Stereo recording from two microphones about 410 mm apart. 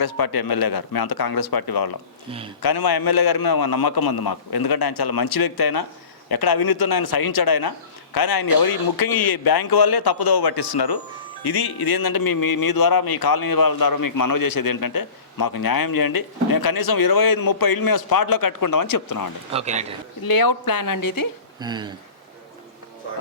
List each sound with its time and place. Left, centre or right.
0.0 s speech: left
19.5 s a man's voice: centre
20.2 s speech: left
21.6 s a man's voice: centre